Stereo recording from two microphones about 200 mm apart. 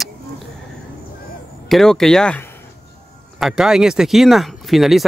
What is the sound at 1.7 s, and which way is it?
Speech, centre (ahead or behind).